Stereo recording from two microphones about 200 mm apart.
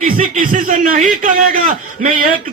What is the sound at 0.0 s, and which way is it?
Speech, 40° right (ahead or behind).